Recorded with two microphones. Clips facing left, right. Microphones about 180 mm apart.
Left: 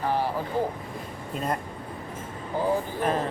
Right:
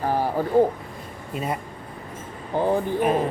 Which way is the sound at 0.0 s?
45° right (ahead or behind).